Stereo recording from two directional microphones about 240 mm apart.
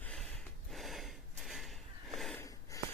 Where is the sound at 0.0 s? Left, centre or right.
Centre.